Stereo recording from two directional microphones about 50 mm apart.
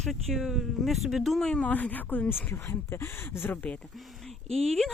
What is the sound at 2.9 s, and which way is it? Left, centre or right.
Speech, left.